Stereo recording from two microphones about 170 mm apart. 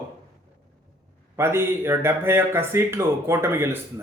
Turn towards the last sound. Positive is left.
turn(degrees=-15)  # may be behind; listen again after turning